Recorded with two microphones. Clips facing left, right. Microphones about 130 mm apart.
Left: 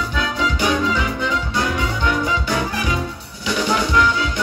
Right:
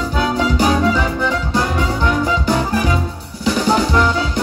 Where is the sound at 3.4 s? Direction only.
35° right (ahead or behind).